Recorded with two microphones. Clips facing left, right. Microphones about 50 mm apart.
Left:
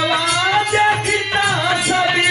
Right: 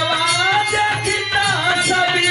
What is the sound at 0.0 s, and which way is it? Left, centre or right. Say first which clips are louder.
Music: even; centre.